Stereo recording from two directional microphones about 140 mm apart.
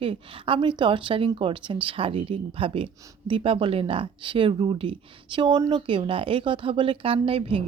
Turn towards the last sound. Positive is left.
turn(degrees=-40)  # may be behind; listen again after turning